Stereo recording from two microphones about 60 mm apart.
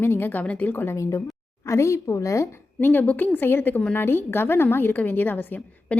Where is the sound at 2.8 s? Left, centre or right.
Left.